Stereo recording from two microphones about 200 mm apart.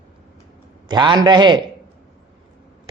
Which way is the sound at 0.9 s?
20° right (ahead or behind).